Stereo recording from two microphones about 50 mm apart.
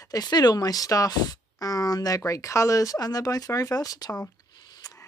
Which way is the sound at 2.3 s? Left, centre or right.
Left.